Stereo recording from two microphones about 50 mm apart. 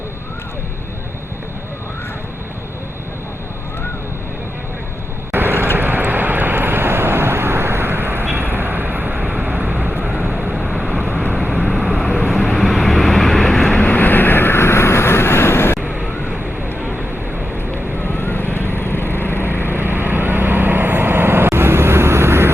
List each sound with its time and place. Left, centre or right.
5.3 s vehicle: right
10.0 s vehicle: centre
11.8 s vehicle: centre
13.7 s vehicle: left
15.8 s vehicle: centre
18.0 s vehicle: left
19.7 s vehicle: right